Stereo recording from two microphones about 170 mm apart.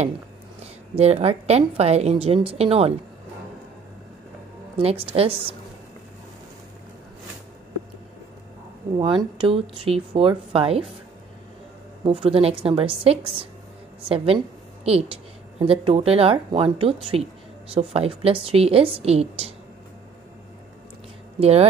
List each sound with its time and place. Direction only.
0.9 s speech: 35° right (ahead or behind)
4.7 s speech: 35° right (ahead or behind)
8.9 s speech: 30° right (ahead or behind)
12.0 s speech: 35° right (ahead or behind)
21.4 s speech: 40° right (ahead or behind)